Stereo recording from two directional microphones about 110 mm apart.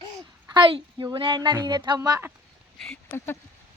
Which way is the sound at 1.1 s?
50° right (ahead or behind).